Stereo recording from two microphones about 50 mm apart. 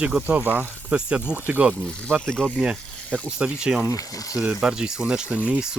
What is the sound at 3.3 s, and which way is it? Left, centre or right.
Speech, centre.